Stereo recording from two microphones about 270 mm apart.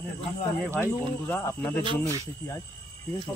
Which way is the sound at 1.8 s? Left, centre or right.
Centre.